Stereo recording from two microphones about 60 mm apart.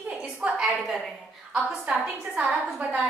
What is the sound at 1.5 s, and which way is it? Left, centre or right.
A woman's voice, centre.